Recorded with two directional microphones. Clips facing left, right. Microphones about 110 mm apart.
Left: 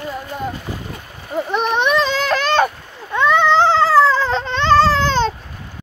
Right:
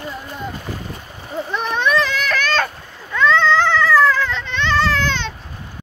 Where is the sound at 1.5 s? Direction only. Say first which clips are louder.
Left 2 dB; 20° left (ahead or behind).